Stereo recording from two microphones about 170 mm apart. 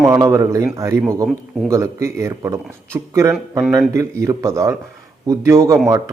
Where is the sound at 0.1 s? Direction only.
15° right (ahead or behind).